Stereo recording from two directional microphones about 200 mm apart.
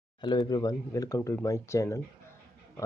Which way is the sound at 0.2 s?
20° left (ahead or behind).